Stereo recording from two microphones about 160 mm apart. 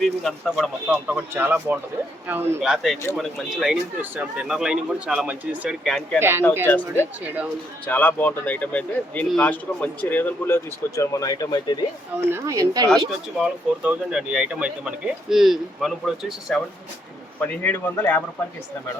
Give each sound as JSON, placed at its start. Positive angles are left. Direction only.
{"t": 0.0, "sound": "speech", "side_deg": 0}
{"t": 0.9, "sound": "speech", "side_deg": -10}
{"t": 2.6, "sound": "speech", "side_deg": 0}
{"t": 6.1, "sound": "speech", "side_deg": -15}
{"t": 6.7, "sound": "speech", "side_deg": 15}
{"t": 12.3, "sound": "speech", "side_deg": -20}
{"t": 13.1, "sound": "speech", "side_deg": -5}
{"t": 17.4, "sound": "speech", "side_deg": 10}